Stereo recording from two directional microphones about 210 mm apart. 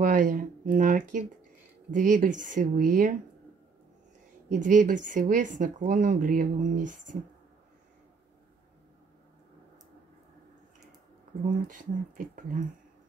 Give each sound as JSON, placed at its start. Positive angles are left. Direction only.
{"t": 0.0, "sound": "a sound", "side_deg": -40}
{"t": 1.9, "sound": "speech", "side_deg": -40}
{"t": 4.6, "sound": "speech", "side_deg": -40}
{"t": 11.4, "sound": "speech", "side_deg": -40}